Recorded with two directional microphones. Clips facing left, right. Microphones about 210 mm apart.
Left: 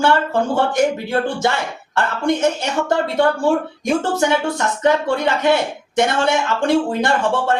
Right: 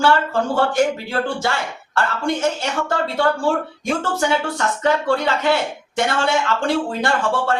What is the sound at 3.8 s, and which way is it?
Speech, 15° left (ahead or behind).